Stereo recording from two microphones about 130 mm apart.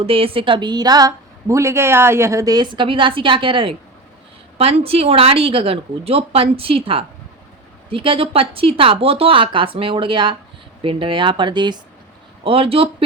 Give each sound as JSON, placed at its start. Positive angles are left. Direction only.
{"t": 0.0, "sound": "a woman's voice", "side_deg": -45}